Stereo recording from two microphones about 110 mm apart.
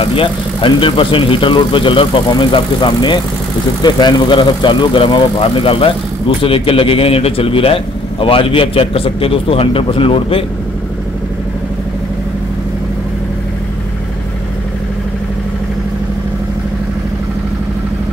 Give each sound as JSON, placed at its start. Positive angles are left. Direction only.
{"t": 0.0, "sound": "speech", "side_deg": 55}